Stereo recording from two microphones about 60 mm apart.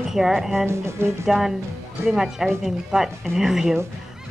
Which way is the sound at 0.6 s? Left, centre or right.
Right.